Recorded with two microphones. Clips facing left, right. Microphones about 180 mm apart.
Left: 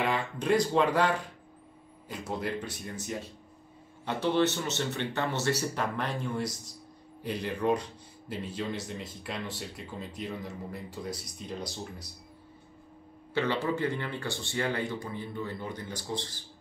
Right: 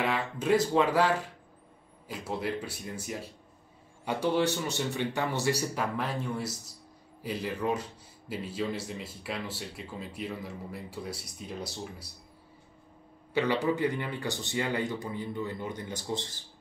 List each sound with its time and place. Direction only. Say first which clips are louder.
0.0 s speech: even; 5° right (ahead or behind)
13.3 s speech: right 2 dB; 15° right (ahead or behind)